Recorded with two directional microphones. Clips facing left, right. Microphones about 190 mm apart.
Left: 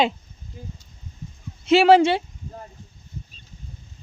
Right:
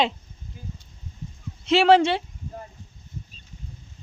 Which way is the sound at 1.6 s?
5° left (ahead or behind).